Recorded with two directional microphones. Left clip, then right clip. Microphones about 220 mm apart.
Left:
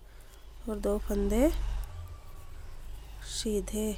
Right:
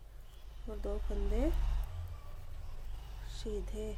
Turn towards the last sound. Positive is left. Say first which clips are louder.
# left 9 dB
turn(degrees=50)  # may be behind; listen again after turning